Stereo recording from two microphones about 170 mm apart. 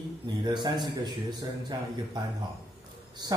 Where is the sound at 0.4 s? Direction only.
25° right (ahead or behind).